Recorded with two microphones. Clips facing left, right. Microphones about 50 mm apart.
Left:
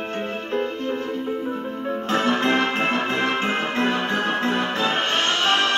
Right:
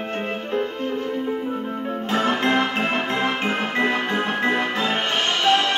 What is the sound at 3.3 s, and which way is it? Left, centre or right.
Music, left.